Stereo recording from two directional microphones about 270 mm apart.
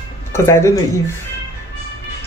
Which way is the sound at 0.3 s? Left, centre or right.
Centre.